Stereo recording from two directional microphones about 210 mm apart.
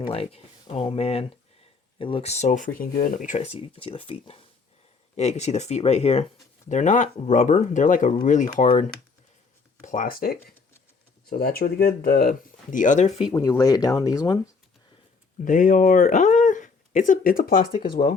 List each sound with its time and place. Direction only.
0.0 s speech: 25° left (ahead or behind)
13.3 s speech: 15° left (ahead or behind)
15.4 s speech: 40° left (ahead or behind)